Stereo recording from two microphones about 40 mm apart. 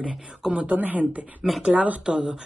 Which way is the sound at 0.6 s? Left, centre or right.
Right.